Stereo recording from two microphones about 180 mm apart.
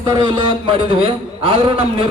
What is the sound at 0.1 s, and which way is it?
A man's voice, 25° right (ahead or behind).